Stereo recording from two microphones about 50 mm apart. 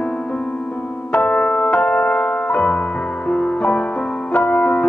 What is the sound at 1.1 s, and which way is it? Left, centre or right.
Music, left.